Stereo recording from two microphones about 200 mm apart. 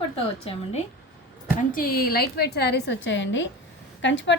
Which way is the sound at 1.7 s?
45° left (ahead or behind).